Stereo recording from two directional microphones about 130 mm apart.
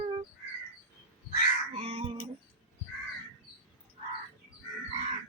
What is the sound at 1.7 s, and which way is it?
Crow, 50° right (ahead or behind).